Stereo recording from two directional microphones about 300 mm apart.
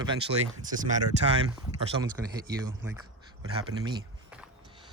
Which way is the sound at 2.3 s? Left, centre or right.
Centre.